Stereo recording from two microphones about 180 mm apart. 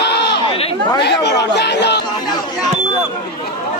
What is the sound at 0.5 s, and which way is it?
Chatter, 30° left (ahead or behind).